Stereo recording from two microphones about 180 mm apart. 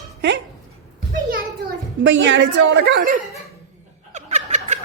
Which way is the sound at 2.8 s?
55° right (ahead or behind).